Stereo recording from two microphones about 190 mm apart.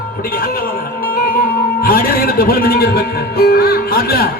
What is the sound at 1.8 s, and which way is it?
Speech, 50° left (ahead or behind).